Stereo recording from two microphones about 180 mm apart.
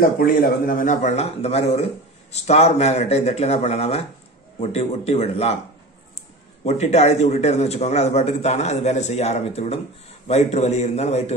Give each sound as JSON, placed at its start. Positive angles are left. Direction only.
{"t": 0.2, "sound": "a man's voice", "side_deg": 50}
{"t": 6.6, "sound": "a man's voice", "side_deg": 35}